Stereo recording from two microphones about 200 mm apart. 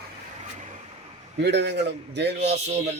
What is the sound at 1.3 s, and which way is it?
A man's voice, 60° right (ahead or behind).